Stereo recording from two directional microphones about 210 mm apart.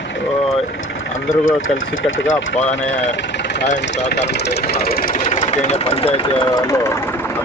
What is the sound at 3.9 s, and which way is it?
Speech, 55° left (ahead or behind).